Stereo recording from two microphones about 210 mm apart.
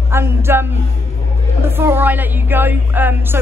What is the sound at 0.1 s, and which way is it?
A woman's voice, 10° right (ahead or behind).